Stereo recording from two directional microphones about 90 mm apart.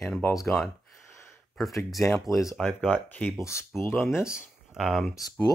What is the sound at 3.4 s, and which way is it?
Speech, 30° left (ahead or behind).